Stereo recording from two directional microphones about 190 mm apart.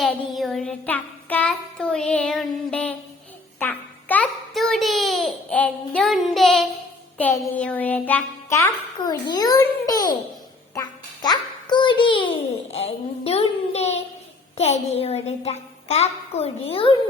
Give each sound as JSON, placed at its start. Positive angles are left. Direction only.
{"t": 0.0, "sound": "a child's voice", "side_deg": 0}